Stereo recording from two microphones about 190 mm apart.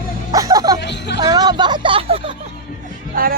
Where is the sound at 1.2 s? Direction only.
20° right (ahead or behind).